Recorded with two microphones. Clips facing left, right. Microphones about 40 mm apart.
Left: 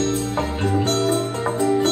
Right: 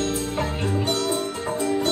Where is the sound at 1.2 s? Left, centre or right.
Centre.